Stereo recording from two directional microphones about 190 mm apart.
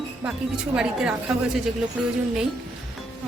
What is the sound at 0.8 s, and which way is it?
Speech, 5° right (ahead or behind).